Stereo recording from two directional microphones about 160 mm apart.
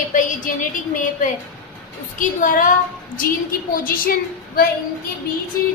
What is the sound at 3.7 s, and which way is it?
Speech, 60° left (ahead or behind).